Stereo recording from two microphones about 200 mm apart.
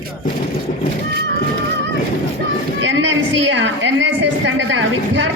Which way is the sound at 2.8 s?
70° right (ahead or behind).